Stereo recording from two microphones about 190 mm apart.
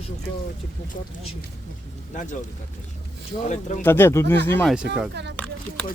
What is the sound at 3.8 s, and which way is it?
Speech, 10° left (ahead or behind).